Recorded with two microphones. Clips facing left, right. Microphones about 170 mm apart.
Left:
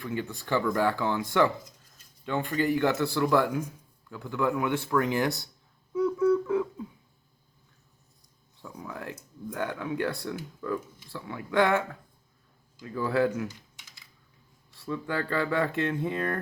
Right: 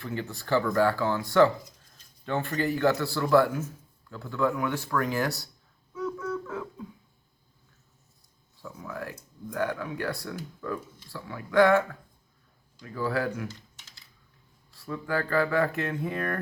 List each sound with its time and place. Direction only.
0.1 s speech: 20° left (ahead or behind)
2.6 s a man's voice: 20° left (ahead or behind)
6.0 s a sound: 20° left (ahead or behind)
8.9 s speech: 25° left (ahead or behind)
12.8 s speech: 25° left (ahead or behind)
14.8 s speech: 25° left (ahead or behind)